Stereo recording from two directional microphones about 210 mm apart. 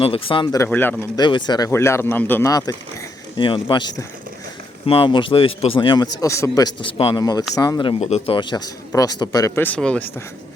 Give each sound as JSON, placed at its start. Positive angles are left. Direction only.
{"t": 0.0, "sound": "speech", "side_deg": 25}
{"t": 1.2, "sound": "a man's voice", "side_deg": 20}